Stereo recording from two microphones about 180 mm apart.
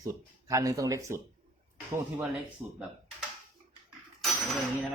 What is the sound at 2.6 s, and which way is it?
Speech, 10° right (ahead or behind).